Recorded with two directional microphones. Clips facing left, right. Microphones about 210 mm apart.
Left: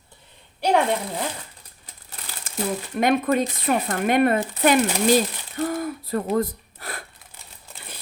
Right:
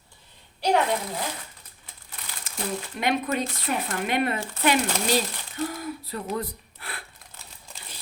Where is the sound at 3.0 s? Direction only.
45° left (ahead or behind).